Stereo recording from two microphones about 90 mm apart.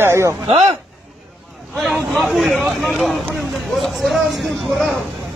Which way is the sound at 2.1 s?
Centre (ahead or behind).